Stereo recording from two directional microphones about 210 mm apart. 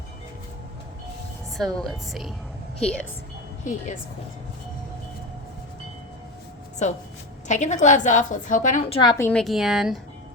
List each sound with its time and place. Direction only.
1.5 s a woman's voice: centre (ahead or behind)
3.6 s a woman's voice: 35° left (ahead or behind)
7.4 s a woman's voice: 35° left (ahead or behind)
9.0 s a woman's voice: 10° left (ahead or behind)